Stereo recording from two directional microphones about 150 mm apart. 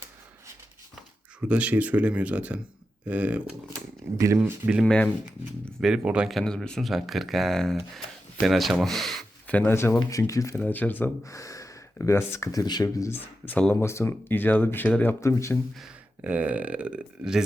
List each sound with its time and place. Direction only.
1.4 s speech: 10° right (ahead or behind)
4.9 s speech: 10° left (ahead or behind)
15.8 s speech: 10° right (ahead or behind)